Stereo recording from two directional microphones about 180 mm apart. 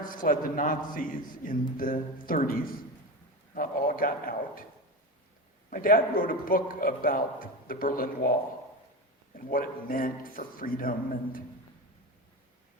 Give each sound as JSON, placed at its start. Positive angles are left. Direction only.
{"t": 0.0, "sound": "a man's voice", "side_deg": 50}
{"t": 5.7, "sound": "a man's voice", "side_deg": 50}
{"t": 9.3, "sound": "a man's voice", "side_deg": 50}